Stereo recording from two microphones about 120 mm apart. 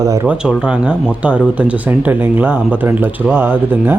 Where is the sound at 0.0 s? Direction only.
25° right (ahead or behind).